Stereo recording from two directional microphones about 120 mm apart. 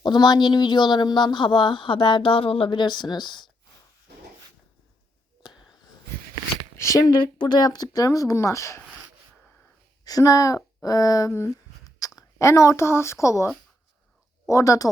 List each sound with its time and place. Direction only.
0.0 s speech: 35° left (ahead or behind)
5.4 s a sound: 40° left (ahead or behind)
6.7 s a sound: 25° left (ahead or behind)
7.3 s speech: 35° left (ahead or behind)
10.0 s speech: 30° left (ahead or behind)
11.3 s speech: 20° left (ahead or behind)
14.5 s speech: 25° left (ahead or behind)